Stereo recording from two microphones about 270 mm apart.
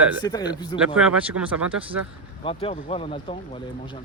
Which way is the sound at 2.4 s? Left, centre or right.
Centre.